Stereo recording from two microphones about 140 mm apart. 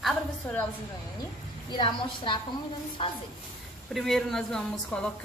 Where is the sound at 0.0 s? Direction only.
10° left (ahead or behind).